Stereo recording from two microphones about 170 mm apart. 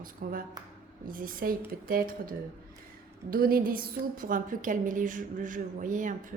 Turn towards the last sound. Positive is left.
turn(degrees=-50)  # may be behind; listen again after turning